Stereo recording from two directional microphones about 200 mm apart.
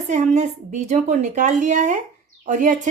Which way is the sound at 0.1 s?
35° right (ahead or behind).